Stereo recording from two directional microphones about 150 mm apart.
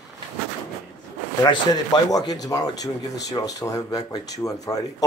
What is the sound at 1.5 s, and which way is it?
Speech, 30° left (ahead or behind).